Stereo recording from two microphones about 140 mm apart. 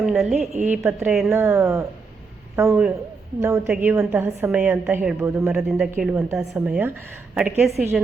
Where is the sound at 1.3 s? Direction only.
15° right (ahead or behind).